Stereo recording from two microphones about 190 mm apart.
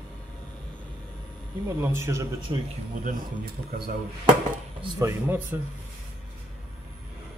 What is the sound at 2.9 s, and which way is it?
Speech, 45° right (ahead or behind).